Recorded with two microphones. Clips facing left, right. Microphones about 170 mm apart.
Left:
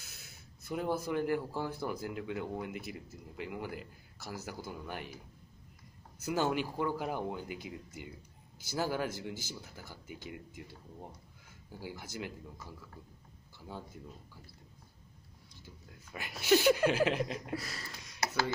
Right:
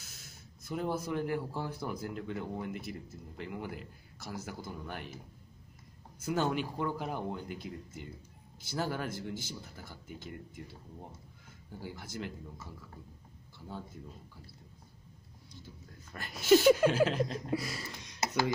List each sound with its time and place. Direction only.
0.0 s a sound: 50° right (ahead or behind)
0.7 s speech: 5° left (ahead or behind)
6.2 s speech: 5° left (ahead or behind)
11.8 s speech: 5° left (ahead or behind)
16.1 s speech: 10° left (ahead or behind)
17.6 s speech: 15° right (ahead or behind)